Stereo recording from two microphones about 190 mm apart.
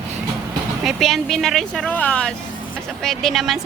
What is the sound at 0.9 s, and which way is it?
A woman's voice, centre (ahead or behind).